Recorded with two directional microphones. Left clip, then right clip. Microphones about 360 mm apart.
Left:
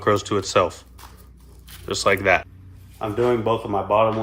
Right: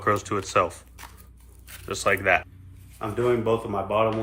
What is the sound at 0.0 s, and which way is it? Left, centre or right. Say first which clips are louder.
Speech: left 4 dB; centre.